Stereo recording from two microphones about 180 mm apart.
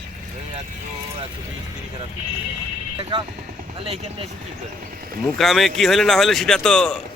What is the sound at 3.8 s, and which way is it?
Speech, 30° right (ahead or behind).